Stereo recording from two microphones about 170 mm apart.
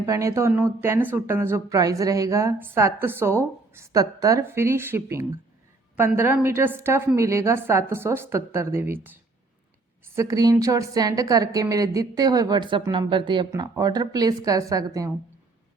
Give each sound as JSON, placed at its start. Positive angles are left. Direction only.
{"t": 0.0, "sound": "a woman's voice", "side_deg": -20}
{"t": 10.2, "sound": "a woman's voice", "side_deg": -20}